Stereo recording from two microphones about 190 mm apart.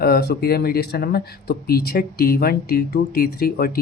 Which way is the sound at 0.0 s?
55° left (ahead or behind).